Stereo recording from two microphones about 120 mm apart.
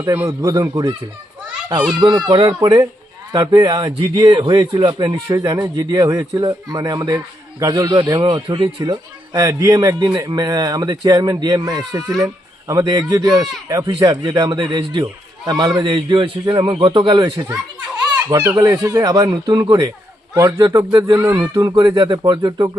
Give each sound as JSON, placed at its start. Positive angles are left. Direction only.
{"t": 0.0, "sound": "speech", "side_deg": -20}
{"t": 0.4, "sound": "speech", "side_deg": -35}
{"t": 2.0, "sound": "speech", "side_deg": -35}
{"t": 21.5, "sound": "speech", "side_deg": -35}